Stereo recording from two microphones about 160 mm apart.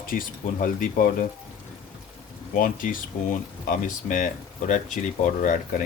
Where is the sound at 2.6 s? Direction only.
60° left (ahead or behind).